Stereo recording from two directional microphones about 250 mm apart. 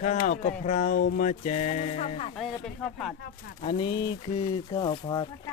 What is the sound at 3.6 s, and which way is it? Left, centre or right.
Speech, centre.